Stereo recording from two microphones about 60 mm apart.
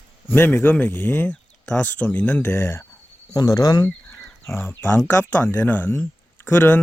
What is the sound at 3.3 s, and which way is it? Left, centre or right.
Speech, left.